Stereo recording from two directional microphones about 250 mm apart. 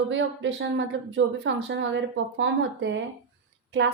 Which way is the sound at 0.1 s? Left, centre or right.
Right.